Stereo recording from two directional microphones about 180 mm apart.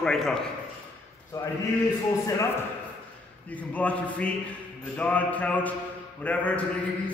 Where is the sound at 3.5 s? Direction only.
10° left (ahead or behind).